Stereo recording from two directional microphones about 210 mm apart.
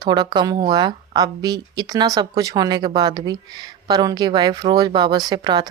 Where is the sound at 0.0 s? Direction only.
20° right (ahead or behind).